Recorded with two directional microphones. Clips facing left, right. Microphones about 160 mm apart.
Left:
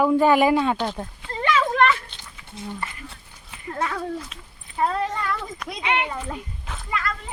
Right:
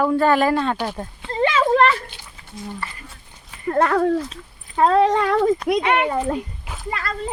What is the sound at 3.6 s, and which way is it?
Speech, 60° right (ahead or behind).